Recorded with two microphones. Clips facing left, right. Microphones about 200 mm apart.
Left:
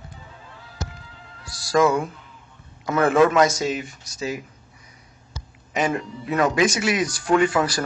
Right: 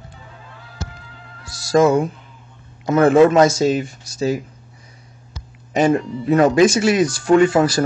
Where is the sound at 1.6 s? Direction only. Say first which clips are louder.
Right 5 dB; 25° right (ahead or behind).